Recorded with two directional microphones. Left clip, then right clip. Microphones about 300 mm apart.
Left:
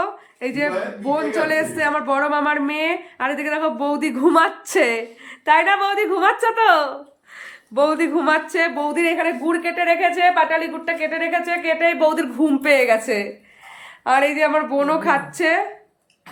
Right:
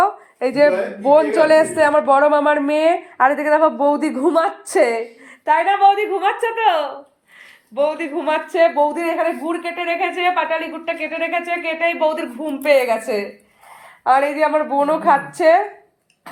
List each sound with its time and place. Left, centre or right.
0.0 s a woman's voice: centre
4.1 s a woman's voice: centre